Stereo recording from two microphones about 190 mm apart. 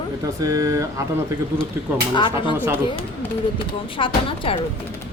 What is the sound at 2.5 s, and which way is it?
Speech, 10° right (ahead or behind).